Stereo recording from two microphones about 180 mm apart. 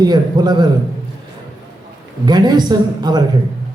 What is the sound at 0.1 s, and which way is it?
Speech, 25° right (ahead or behind).